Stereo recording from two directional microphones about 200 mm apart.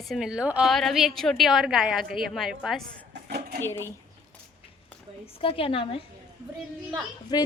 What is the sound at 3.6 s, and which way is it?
Speech, 15° left (ahead or behind).